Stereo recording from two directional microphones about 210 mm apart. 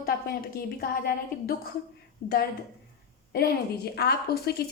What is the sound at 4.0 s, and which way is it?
Speech, 50° left (ahead or behind).